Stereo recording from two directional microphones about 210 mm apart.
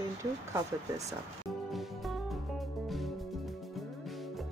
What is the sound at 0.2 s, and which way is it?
Speech, 15° right (ahead or behind).